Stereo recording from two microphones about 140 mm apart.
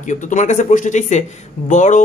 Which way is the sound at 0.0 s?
60° left (ahead or behind).